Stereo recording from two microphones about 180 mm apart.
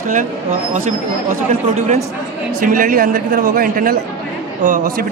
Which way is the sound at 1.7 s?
40° right (ahead or behind).